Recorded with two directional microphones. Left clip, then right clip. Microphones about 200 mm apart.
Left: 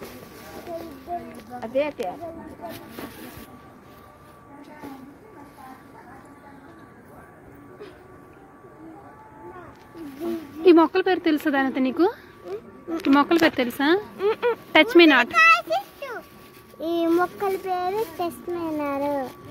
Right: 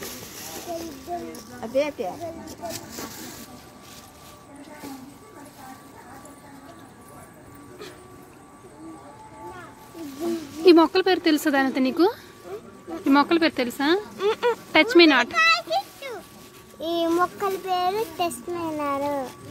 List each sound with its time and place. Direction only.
1.6 s speech: 20° right (ahead or behind)
10.6 s speech: 5° right (ahead or behind)
15.3 s a sound: 25° left (ahead or behind)
16.8 s a child's voice: 15° left (ahead or behind)